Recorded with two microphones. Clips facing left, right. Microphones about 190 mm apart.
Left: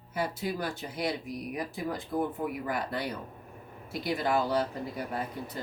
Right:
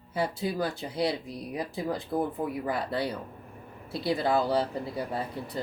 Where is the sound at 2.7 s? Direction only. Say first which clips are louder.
Right 3 dB; 30° right (ahead or behind).